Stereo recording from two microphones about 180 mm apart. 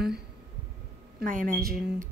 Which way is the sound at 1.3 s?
50° right (ahead or behind).